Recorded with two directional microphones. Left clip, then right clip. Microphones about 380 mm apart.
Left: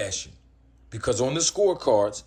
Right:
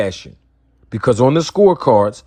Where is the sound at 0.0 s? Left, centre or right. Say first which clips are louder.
Right 10 dB; centre.